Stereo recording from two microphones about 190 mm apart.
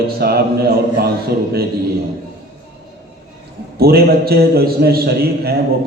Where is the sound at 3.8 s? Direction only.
55° right (ahead or behind).